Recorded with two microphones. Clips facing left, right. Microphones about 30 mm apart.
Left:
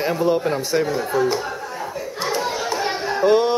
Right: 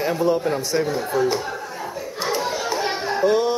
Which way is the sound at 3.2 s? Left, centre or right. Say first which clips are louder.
Left 3 dB; left.